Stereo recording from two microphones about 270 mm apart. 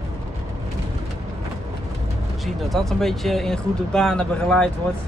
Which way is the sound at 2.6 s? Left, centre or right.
Centre.